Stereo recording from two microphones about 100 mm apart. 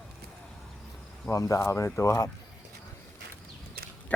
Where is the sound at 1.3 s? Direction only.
35° left (ahead or behind).